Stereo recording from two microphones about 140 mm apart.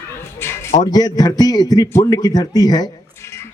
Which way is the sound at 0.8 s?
30° left (ahead or behind).